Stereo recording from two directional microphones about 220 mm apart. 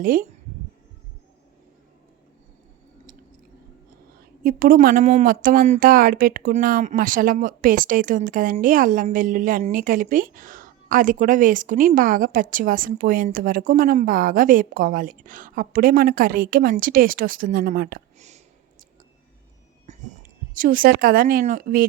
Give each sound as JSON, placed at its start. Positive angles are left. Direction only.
{"t": 0.0, "sound": "speech", "side_deg": -40}
{"t": 4.4, "sound": "speech", "side_deg": -40}
{"t": 19.9, "sound": "heart sounds", "side_deg": -30}
{"t": 20.5, "sound": "speech", "side_deg": -40}